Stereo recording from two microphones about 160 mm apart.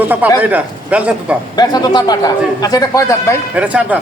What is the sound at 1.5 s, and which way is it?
A man's voice, 25° left (ahead or behind).